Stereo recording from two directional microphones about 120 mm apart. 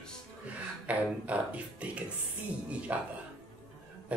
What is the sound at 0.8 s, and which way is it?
Speech, 10° right (ahead or behind).